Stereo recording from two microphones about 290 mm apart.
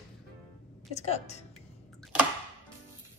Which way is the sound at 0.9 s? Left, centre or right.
Left.